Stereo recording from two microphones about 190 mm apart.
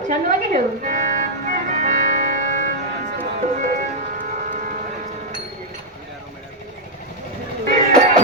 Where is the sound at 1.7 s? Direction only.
40° right (ahead or behind).